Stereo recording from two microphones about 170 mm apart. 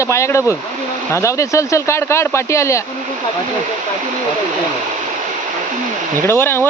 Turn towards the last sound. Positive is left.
turn(degrees=15)  # may be behind; listen again after turning